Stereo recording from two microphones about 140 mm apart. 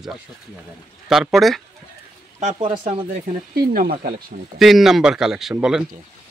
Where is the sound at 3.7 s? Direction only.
90° right.